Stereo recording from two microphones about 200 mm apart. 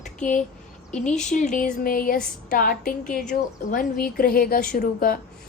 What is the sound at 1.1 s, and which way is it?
A woman's voice, 35° left (ahead or behind).